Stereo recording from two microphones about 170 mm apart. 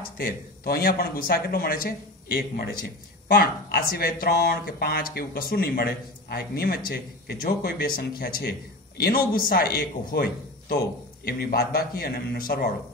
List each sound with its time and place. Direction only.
0.0 s speech: 60° left (ahead or behind)